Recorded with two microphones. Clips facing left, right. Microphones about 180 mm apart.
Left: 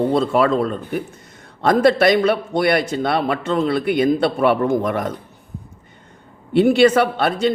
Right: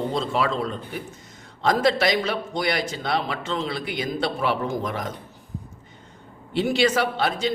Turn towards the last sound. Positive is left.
turn(degrees=55)  # may be behind; listen again after turning